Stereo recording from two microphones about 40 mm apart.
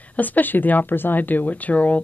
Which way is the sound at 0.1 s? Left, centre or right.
Left.